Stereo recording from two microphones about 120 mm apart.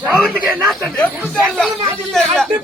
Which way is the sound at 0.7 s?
Centre (ahead or behind).